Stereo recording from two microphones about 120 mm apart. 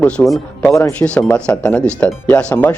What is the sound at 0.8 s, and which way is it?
Speech, 20° left (ahead or behind).